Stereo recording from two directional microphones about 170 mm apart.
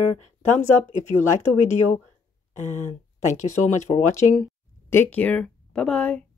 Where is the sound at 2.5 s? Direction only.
45° left (ahead or behind).